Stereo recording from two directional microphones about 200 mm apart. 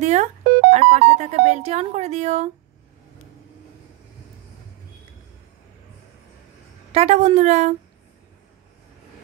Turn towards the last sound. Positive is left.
turn(degrees=-35)  # may be behind; listen again after turning